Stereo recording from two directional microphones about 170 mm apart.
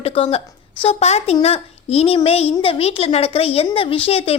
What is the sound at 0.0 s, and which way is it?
Speech, 35° left (ahead or behind).